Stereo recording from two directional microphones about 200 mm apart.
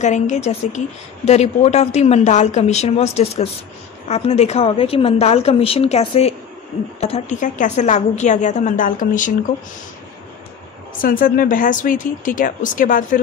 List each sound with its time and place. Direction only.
0.0 s a woman's voice: 35° left (ahead or behind)
11.0 s speech: 45° left (ahead or behind)